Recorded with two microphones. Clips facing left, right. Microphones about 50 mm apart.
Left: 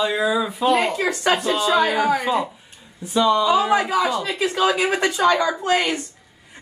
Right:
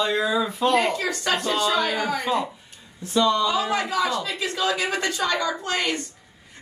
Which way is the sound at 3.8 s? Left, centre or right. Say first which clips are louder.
Left 4 dB; left.